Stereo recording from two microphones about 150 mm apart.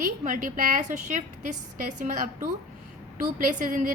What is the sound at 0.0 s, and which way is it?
A woman's voice, 60° right (ahead or behind).